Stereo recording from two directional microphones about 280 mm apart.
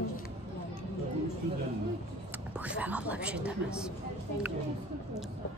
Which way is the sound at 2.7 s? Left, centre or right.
Centre.